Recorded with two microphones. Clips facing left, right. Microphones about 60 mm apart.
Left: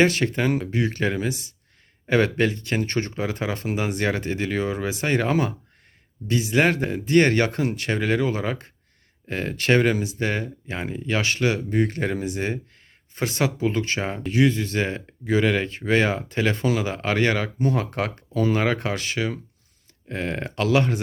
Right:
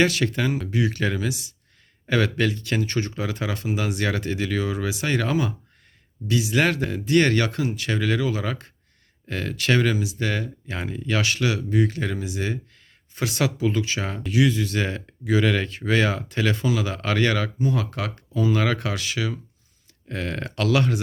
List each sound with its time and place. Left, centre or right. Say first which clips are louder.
0.0 s speech: left 1 dB; left
6.6 s speech: left 3 dB; left
8.4 s speech: left 2 dB; left
9.9 s speech: left 1 dB; left
10.2 s speech: left 1 dB; left
17.7 s speech: left 2 dB; left
20.1 s speech: left 1 dB; left